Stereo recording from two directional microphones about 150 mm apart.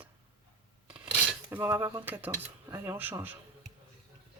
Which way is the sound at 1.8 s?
35° right (ahead or behind).